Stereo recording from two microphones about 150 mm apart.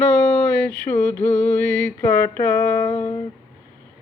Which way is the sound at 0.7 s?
20° left (ahead or behind).